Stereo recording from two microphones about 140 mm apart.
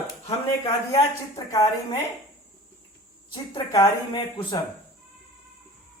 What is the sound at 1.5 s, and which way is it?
Speech, 25° left (ahead or behind).